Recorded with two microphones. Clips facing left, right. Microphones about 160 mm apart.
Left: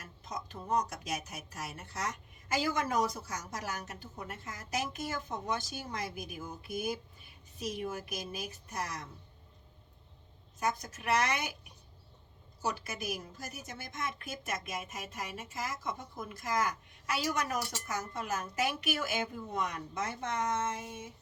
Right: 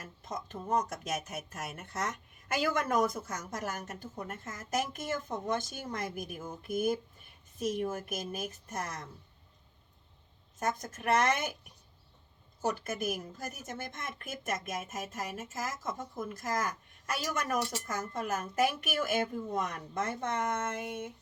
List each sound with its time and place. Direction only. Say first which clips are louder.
0.3 s a woman's voice: right 1 dB; 50° right (ahead or behind)
10.6 s a woman's voice: right 1 dB; 50° right (ahead or behind)
12.6 s a woman's voice: right 4 dB; 50° right (ahead or behind)